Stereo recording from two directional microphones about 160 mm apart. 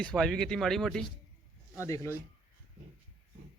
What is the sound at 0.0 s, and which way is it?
A man's voice, 5° left (ahead or behind).